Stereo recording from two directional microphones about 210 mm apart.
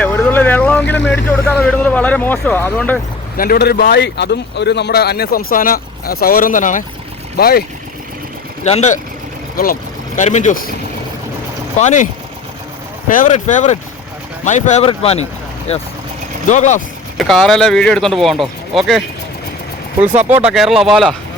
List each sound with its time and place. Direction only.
0.0 s vehicle: 10° left (ahead or behind)
1.1 s speech: 5° left (ahead or behind)
3.3 s speech: 45° left (ahead or behind)
8.6 s speech: 30° left (ahead or behind)
10.2 s speech: 35° left (ahead or behind)
11.8 s speech: 35° left (ahead or behind)
13.1 s speech: 35° left (ahead or behind)
16.5 s speech: 35° left (ahead or behind)
17.2 s speech: centre (ahead or behind)
20.4 s speech: centre (ahead or behind)